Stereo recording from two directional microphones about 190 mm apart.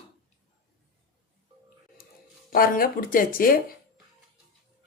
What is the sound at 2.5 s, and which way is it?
Speech, 50° left (ahead or behind).